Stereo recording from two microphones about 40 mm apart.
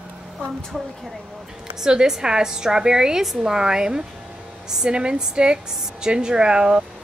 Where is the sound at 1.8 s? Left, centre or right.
Centre.